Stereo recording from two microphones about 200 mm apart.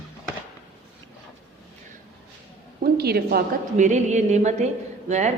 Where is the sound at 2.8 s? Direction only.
50° right (ahead or behind).